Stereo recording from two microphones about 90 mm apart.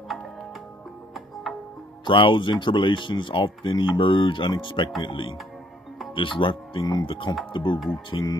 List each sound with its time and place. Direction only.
1.5 s music: 5° right (ahead or behind)
2.0 s speech: 65° left (ahead or behind)
7.1 s speech: 70° left (ahead or behind); by 8.3 s 55° left (ahead or behind)